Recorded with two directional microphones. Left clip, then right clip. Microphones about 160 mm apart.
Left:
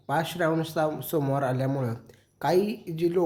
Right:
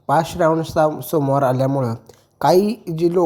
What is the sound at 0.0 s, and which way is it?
A woman's voice, 25° right (ahead or behind).